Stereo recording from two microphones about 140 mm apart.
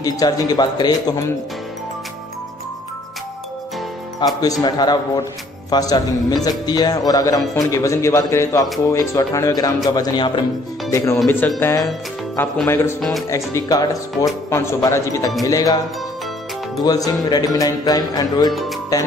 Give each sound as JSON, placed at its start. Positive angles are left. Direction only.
{"t": 0.0, "sound": "speech", "side_deg": 25}
{"t": 4.4, "sound": "speech", "side_deg": 25}
{"t": 9.8, "sound": "music", "side_deg": 30}
{"t": 10.9, "sound": "speech", "side_deg": 20}
{"t": 11.6, "sound": "speech", "side_deg": 25}
{"t": 16.8, "sound": "speech", "side_deg": 25}